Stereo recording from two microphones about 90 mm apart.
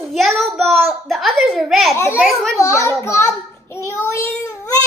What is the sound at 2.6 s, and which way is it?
Speech, 35° left (ahead or behind).